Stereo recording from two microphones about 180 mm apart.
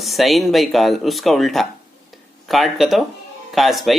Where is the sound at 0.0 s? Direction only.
Centre (ahead or behind).